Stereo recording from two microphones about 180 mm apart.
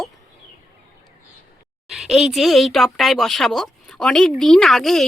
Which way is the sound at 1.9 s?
Centre (ahead or behind).